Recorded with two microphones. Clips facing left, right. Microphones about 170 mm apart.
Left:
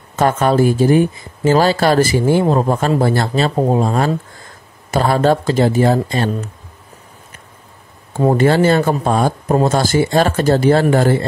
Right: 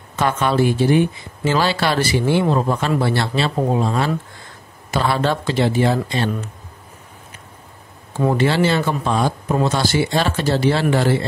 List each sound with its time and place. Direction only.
0.1 s speech: 45° left (ahead or behind)
8.2 s speech: 40° left (ahead or behind)